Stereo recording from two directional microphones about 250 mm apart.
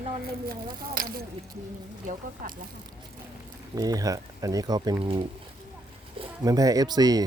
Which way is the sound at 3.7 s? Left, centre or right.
Centre.